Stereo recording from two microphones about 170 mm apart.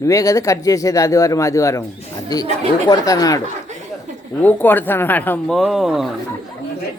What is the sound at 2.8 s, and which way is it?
Speech, 20° left (ahead or behind).